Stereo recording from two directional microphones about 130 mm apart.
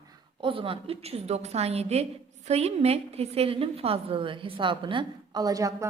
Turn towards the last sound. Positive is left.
turn(degrees=-25)  # may be behind; listen again after turning